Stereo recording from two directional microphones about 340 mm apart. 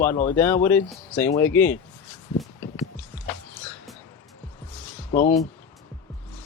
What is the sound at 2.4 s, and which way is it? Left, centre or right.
Music, centre.